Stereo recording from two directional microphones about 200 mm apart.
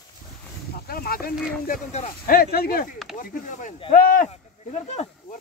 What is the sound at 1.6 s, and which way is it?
Speech, 40° left (ahead or behind).